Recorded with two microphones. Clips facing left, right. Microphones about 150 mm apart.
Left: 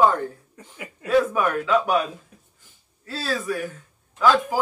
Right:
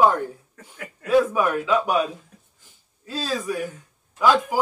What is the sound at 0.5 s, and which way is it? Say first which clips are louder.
Speech: even; 10° left (ahead or behind).